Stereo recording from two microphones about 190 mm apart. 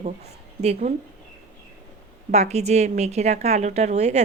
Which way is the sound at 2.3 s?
35° right (ahead or behind).